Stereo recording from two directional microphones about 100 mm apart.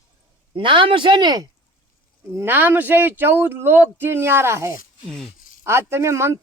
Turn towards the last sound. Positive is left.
turn(degrees=-30)  # may be behind; listen again after turning